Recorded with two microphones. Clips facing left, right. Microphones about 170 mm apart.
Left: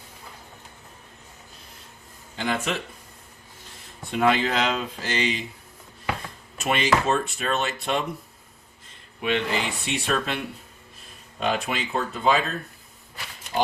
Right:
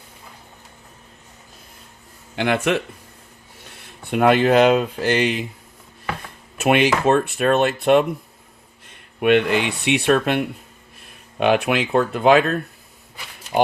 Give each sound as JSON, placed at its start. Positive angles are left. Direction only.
{"t": 2.3, "sound": "speech", "side_deg": -65}
{"t": 6.6, "sound": "speech", "side_deg": -60}